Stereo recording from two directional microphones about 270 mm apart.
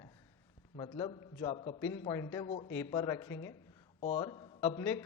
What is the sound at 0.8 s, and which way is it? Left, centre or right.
A man's voice, centre.